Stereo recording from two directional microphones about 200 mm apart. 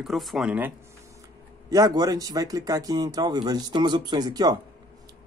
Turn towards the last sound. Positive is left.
turn(degrees=-20)  # may be behind; listen again after turning